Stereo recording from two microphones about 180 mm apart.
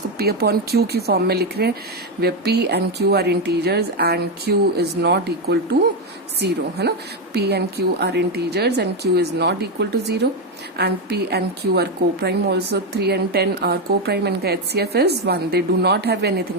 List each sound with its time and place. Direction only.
0.2 s a woman's voice: 60° right (ahead or behind)